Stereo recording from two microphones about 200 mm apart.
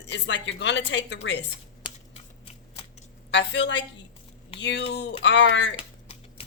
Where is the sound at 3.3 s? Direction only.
60° left (ahead or behind).